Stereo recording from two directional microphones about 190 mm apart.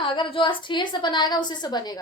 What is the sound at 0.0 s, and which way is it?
A woman's voice, 30° left (ahead or behind).